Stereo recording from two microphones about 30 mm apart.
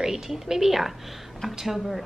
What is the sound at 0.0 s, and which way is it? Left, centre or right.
A woman's voice, centre.